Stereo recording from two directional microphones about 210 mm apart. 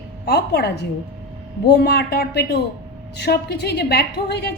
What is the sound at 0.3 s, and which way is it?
A woman's voice, 50° left (ahead or behind).